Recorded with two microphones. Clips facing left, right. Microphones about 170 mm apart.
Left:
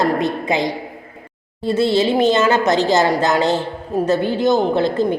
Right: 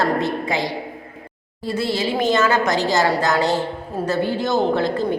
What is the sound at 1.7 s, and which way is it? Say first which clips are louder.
A woman's voice: left 6 dB; 25° left (ahead or behind).